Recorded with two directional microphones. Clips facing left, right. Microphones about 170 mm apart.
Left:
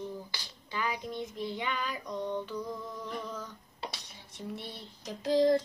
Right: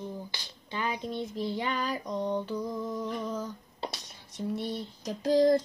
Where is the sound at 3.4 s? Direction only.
45° right (ahead or behind).